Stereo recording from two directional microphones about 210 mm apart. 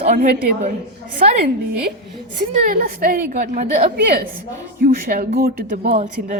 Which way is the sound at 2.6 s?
45° right (ahead or behind).